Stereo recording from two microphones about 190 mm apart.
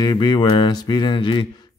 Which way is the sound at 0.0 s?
20° left (ahead or behind).